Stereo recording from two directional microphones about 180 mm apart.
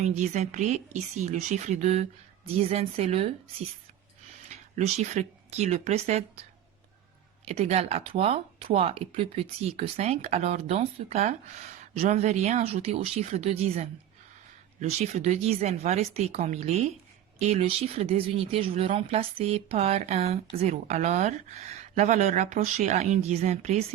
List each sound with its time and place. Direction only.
0.0 s speech: 40° right (ahead or behind)
4.4 s speech: 40° right (ahead or behind)
7.4 s speech: 35° right (ahead or behind)